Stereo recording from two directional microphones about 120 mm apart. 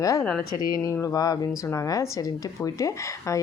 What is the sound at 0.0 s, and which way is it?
A woman's voice, 25° left (ahead or behind).